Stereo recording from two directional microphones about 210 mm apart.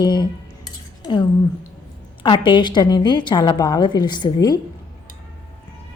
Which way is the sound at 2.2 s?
25° left (ahead or behind).